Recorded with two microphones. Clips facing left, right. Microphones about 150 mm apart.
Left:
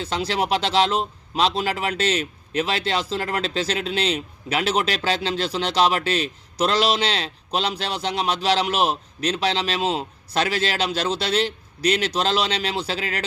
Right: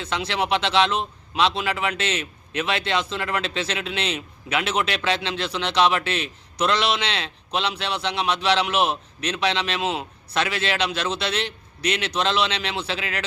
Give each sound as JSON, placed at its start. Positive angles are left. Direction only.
{"t": 0.0, "sound": "speech", "side_deg": 35}